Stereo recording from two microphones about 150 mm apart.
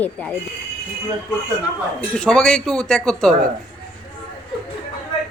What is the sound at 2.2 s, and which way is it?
Speech, 5° left (ahead or behind).